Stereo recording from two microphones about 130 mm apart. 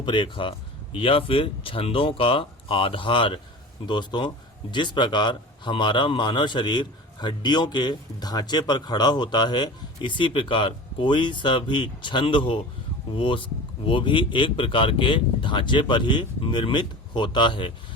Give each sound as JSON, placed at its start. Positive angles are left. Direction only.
{"t": 0.0, "sound": "a man's voice", "side_deg": 40}